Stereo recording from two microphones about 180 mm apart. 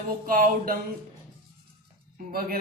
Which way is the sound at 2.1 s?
55° right (ahead or behind).